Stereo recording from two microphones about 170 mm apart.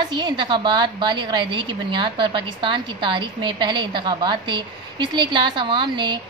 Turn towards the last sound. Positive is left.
turn(degrees=-25)  # may be behind; listen again after turning